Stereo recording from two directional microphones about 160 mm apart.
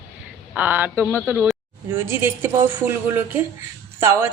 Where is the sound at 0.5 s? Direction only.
10° right (ahead or behind).